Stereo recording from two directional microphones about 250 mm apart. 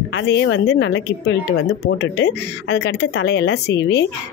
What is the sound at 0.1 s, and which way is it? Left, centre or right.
Speech, left.